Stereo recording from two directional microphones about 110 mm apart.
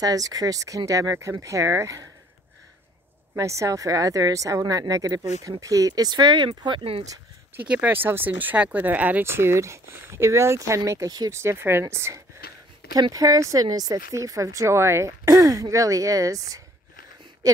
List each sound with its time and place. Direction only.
0.0 s speech: 35° right (ahead or behind)
3.3 s speech: 30° right (ahead or behind); by 7.1 s 55° right (ahead or behind)
7.5 s speech: 15° right (ahead or behind); by 16.6 s 30° right (ahead or behind)